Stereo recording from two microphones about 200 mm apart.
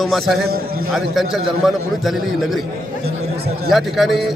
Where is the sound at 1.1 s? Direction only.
Centre (ahead or behind).